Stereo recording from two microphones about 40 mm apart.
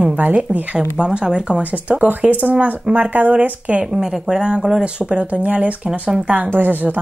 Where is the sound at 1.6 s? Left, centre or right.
Right.